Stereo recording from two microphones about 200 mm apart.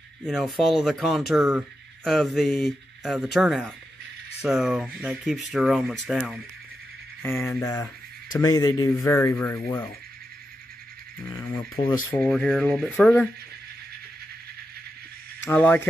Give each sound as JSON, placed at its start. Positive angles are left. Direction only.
{"t": 0.2, "sound": "speech", "side_deg": 0}
{"t": 7.2, "sound": "speech", "side_deg": 10}
{"t": 11.8, "sound": "speech", "side_deg": 5}
{"t": 15.4, "sound": "speech", "side_deg": 5}